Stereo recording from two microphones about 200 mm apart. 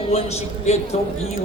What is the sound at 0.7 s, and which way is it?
Speech, 35° left (ahead or behind).